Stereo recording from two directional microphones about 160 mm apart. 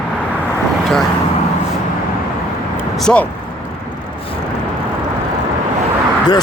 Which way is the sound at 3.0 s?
5° left (ahead or behind).